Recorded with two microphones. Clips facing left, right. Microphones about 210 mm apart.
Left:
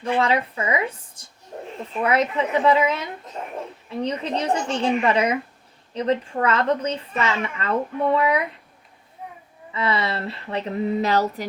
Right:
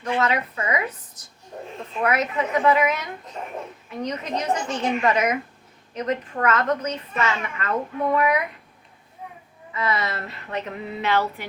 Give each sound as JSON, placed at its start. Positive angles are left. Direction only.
{"t": 0.0, "sound": "a woman's voice", "side_deg": 30}
{"t": 9.7, "sound": "speech", "side_deg": 30}